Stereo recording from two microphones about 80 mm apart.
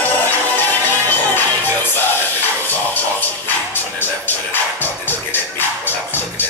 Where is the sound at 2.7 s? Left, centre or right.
Left.